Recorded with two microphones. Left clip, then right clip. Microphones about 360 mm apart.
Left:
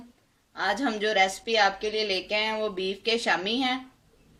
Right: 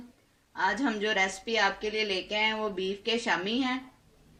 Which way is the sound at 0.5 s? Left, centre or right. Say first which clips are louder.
Left 1 dB; left.